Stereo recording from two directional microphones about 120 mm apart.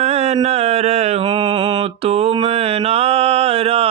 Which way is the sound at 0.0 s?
65° right (ahead or behind).